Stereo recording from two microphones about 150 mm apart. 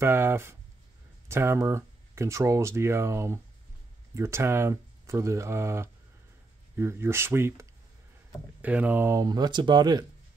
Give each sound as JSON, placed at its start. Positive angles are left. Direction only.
{"t": 0.0, "sound": "speech", "side_deg": -15}
{"t": 8.6, "sound": "speech", "side_deg": -10}